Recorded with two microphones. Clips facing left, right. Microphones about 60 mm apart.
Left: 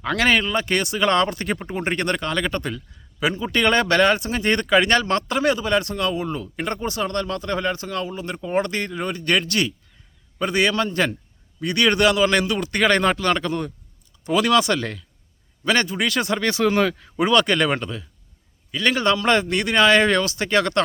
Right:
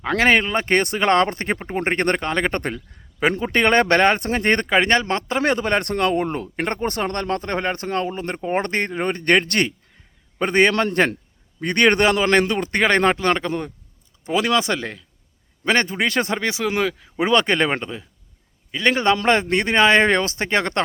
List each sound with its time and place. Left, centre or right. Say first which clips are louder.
0.0 s speech: right 2 dB; right
5.4 s a man's voice: right 2 dB; right
15.6 s speech: right 1 dB; right
16.4 s speech: left 2 dB; centre
17.2 s a man's voice: even; right